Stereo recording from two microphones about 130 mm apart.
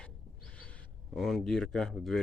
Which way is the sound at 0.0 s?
10° left (ahead or behind).